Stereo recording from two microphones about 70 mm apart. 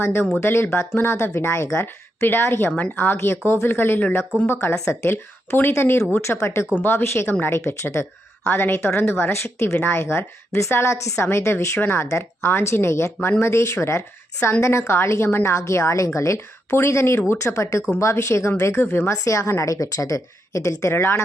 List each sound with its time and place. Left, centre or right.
0.0 s speech: left
10.9 s speech: left
15.5 s a woman's voice: left